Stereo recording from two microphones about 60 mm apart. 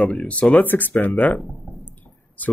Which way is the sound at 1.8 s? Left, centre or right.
Left.